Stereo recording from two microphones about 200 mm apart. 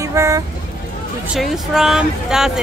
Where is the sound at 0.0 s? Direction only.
15° right (ahead or behind).